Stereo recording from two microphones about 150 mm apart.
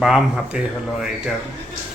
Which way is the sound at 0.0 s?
5° right (ahead or behind).